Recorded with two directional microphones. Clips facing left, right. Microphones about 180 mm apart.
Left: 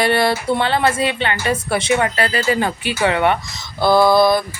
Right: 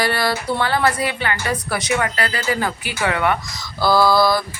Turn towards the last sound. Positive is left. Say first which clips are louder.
# left 3 dB
turn(degrees=20)  # may be behind; listen again after turning